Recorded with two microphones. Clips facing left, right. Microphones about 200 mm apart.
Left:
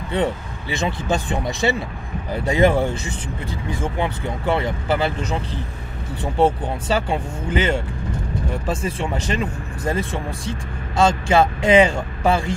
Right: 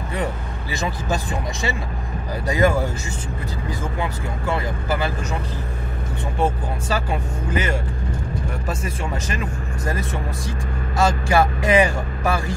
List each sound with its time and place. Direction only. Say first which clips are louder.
0.1 s speech: left 5 dB; 25° left (ahead or behind)